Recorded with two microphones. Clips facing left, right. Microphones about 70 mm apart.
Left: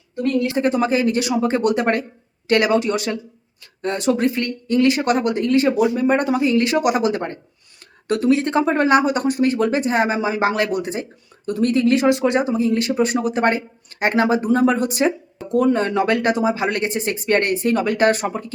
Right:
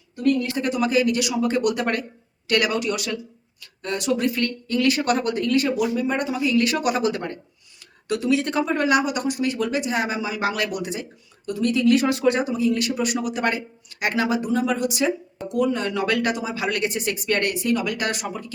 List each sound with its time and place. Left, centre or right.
0.2 s speech: left
5.9 s speech: left
8.0 s speech: left
11.9 s speech: left